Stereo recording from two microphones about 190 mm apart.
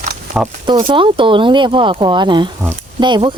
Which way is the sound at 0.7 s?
25° right (ahead or behind).